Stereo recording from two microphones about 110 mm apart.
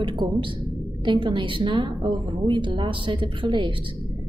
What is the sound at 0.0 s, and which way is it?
A woman's voice, 50° right (ahead or behind).